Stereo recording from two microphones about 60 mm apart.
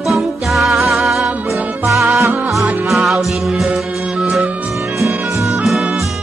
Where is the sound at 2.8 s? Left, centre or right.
Centre.